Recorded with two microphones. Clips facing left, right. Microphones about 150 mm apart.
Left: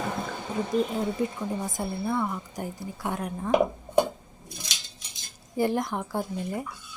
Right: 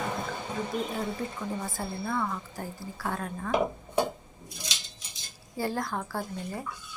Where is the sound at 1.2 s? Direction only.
15° left (ahead or behind).